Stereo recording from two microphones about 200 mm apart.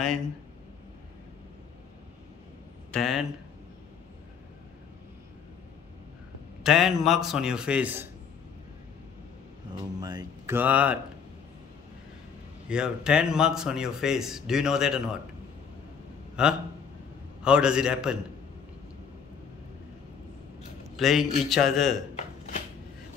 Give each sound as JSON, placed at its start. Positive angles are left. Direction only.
{"t": 2.9, "sound": "speech", "side_deg": 0}
{"t": 6.6, "sound": "a man's voice", "side_deg": 0}
{"t": 9.9, "sound": "speech", "side_deg": -20}
{"t": 12.6, "sound": "a man's voice", "side_deg": -5}
{"t": 16.4, "sound": "a man's voice", "side_deg": -5}
{"t": 20.9, "sound": "a man's voice", "side_deg": 0}